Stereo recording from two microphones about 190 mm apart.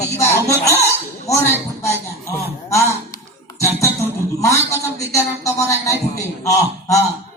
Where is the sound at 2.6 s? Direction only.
15° left (ahead or behind).